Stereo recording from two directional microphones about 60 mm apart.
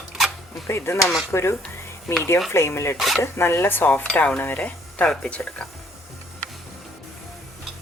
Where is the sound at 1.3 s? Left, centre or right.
Left.